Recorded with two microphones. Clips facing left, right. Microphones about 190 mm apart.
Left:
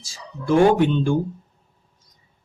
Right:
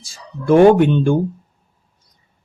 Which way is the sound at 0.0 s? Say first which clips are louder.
Right 5 dB; 60° right (ahead or behind).